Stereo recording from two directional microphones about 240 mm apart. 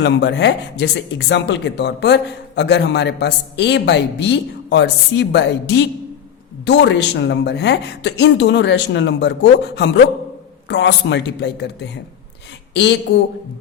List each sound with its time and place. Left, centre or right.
0.0 s speech: left